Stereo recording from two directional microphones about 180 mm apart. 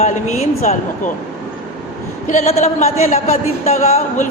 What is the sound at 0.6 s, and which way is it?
Speech, 45° left (ahead or behind).